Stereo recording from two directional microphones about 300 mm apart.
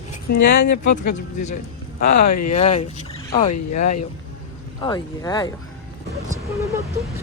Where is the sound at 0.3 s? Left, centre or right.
Left.